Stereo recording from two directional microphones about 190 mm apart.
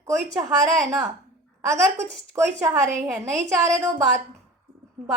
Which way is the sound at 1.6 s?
15° right (ahead or behind).